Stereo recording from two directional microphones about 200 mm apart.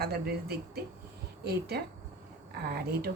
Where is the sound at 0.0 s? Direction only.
50° right (ahead or behind).